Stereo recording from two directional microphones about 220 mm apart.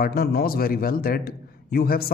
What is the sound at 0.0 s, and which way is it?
A man's voice, 45° left (ahead or behind).